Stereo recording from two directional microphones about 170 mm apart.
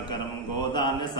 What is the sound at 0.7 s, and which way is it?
Speech, 25° left (ahead or behind).